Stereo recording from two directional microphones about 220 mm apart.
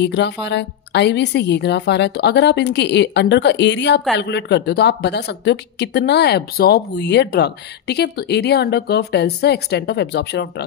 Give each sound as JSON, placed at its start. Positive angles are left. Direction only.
{"t": 0.0, "sound": "speech", "side_deg": 50}